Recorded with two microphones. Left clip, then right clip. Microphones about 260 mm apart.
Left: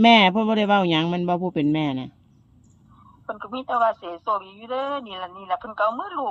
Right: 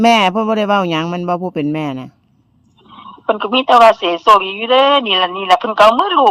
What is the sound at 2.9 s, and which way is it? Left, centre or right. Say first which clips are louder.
Speech: right 17 dB; right.